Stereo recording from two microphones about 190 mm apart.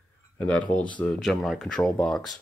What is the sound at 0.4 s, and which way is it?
Speech, 10° left (ahead or behind).